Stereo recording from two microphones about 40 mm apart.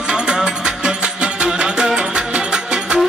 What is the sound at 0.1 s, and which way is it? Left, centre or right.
Music, centre.